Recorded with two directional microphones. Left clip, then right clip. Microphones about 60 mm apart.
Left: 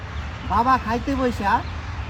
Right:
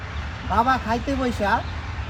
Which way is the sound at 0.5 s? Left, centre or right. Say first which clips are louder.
Left 1 dB; right.